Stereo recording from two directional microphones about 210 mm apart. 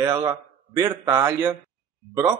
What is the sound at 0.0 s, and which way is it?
A man's voice, 15° right (ahead or behind).